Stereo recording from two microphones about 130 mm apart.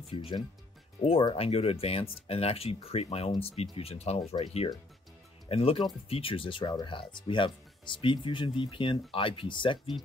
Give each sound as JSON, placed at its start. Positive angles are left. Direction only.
{"t": 0.1, "sound": "speech", "side_deg": 45}